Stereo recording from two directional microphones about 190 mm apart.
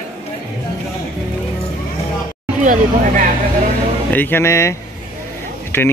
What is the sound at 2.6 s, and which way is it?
Speech, 45° right (ahead or behind).